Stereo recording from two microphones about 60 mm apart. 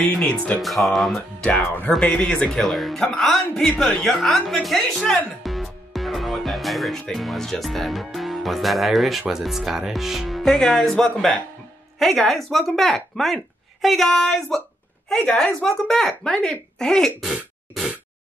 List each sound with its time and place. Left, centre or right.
0.1 s speech: centre
1.4 s speech: left
2.4 s speech: centre
5.4 s music: centre
7.1 s speech: centre
17.2 s throat clearing: centre